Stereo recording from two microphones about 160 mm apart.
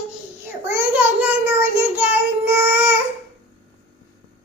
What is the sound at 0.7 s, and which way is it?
Child singing, 10° right (ahead or behind).